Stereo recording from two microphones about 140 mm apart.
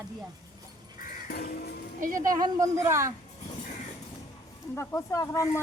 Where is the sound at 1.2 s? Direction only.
90° left.